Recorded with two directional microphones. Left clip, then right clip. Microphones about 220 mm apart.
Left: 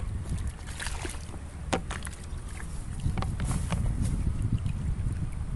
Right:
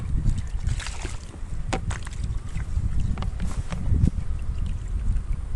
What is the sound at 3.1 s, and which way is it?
Boat, 45° left (ahead or behind).